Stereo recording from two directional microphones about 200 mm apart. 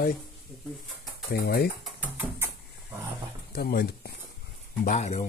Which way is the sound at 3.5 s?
50° left (ahead or behind).